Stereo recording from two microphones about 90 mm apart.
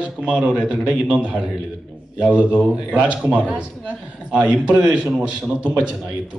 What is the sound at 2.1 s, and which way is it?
A man's voice, 10° right (ahead or behind).